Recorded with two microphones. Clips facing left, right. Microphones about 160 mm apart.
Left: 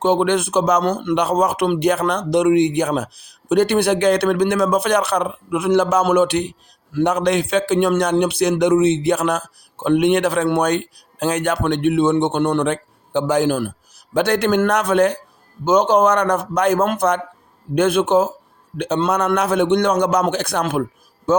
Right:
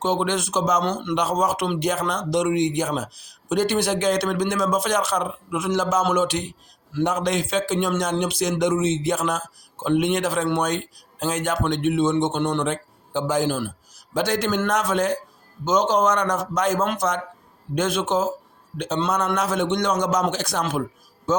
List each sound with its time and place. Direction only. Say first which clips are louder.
0.0 s a man's voice: left 6 dB; 60° left (ahead or behind)